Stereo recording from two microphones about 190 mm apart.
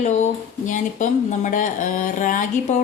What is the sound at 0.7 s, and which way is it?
Speech, 40° left (ahead or behind).